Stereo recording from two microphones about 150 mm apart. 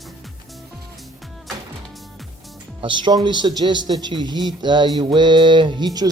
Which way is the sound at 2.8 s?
30° right (ahead or behind).